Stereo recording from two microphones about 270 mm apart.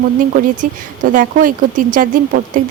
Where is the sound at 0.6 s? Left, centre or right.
Right.